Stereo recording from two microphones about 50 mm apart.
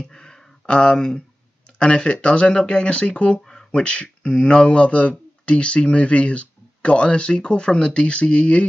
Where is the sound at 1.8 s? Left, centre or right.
Left.